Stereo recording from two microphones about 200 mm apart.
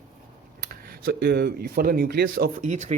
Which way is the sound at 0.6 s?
45° right (ahead or behind).